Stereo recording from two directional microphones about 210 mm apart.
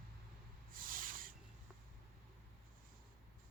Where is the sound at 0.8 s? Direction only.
40° right (ahead or behind).